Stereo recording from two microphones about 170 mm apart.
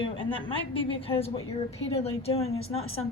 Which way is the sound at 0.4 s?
30° left (ahead or behind).